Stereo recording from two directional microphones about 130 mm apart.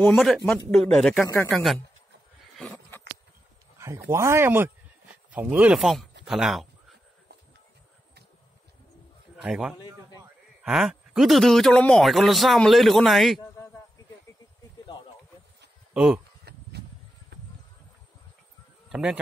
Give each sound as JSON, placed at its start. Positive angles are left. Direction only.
{"t": 0.0, "sound": "a man's voice", "side_deg": 5}
{"t": 2.6, "sound": "a sound", "side_deg": 10}
{"t": 3.7, "sound": "speech", "side_deg": -20}
{"t": 9.4, "sound": "a man's voice", "side_deg": -5}
{"t": 15.9, "sound": "speech", "side_deg": -10}
{"t": 18.9, "sound": "speech", "side_deg": -5}